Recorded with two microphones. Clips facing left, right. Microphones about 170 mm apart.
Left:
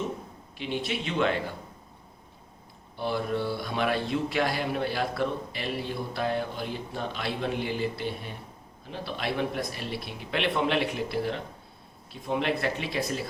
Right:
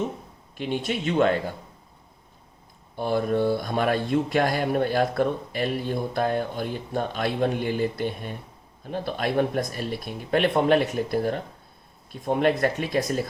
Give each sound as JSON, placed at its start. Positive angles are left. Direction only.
{"t": 0.5, "sound": "speech", "side_deg": -50}
{"t": 2.9, "sound": "speech", "side_deg": -50}